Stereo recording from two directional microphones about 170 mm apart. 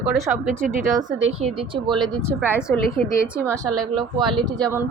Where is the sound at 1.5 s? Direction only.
30° right (ahead or behind).